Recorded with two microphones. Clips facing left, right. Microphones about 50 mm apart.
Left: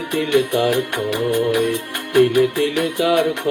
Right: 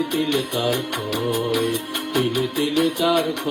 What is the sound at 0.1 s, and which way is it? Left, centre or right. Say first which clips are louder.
Music: left 5 dB; left.